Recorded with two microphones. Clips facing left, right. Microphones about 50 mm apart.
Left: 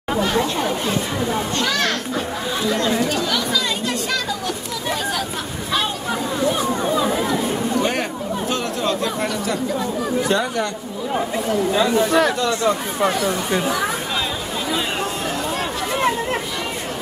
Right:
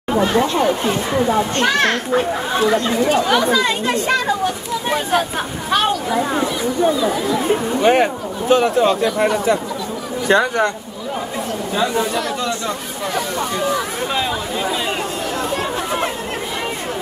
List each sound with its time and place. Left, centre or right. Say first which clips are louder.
0.2 s speech: right 4 dB; right
7.8 s speech: right 7 dB; right
10.2 s speech: right 10 dB; right